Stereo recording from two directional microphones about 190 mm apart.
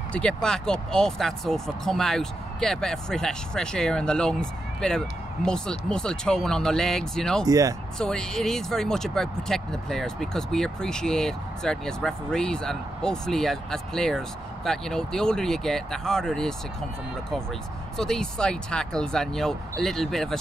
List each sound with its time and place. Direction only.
0.1 s speech: 5° left (ahead or behind)
7.4 s speech: 20° right (ahead or behind)
8.0 s speech: 5° left (ahead or behind)
17.9 s speech: 5° left (ahead or behind)